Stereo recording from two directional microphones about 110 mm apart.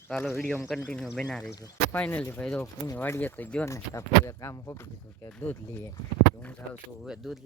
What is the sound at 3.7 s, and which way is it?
Speech, 25° left (ahead or behind).